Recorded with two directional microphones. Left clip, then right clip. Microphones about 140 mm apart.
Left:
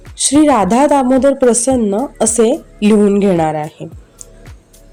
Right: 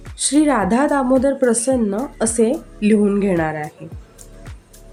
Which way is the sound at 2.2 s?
30° left (ahead or behind).